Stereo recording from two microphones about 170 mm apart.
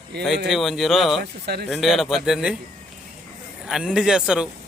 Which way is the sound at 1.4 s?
70° right (ahead or behind).